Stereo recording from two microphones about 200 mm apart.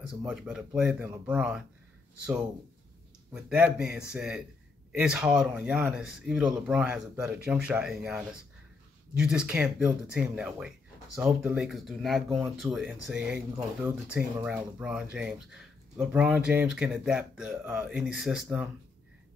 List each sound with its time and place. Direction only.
0.2 s speech: 5° right (ahead or behind)
3.3 s speech: 5° right (ahead or behind)